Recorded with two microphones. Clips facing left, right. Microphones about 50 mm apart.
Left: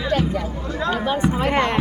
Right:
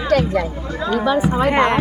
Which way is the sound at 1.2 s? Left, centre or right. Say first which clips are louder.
Right 3 dB; centre.